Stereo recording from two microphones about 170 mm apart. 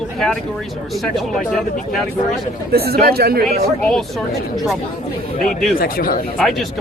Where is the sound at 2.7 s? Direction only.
65° right (ahead or behind).